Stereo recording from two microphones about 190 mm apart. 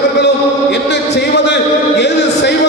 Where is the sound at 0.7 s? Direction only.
65° left (ahead or behind).